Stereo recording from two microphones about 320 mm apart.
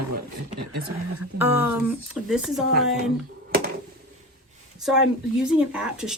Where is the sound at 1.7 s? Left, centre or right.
Centre.